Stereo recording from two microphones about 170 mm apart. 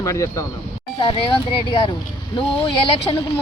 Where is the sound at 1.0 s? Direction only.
30° left (ahead or behind).